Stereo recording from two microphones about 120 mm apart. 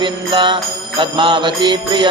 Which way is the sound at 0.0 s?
40° right (ahead or behind).